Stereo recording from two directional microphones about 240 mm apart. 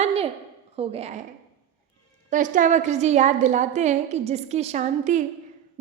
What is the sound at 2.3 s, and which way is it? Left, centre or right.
A woman's voice, right.